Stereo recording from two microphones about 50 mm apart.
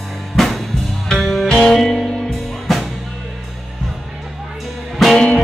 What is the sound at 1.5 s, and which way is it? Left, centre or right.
Music, centre.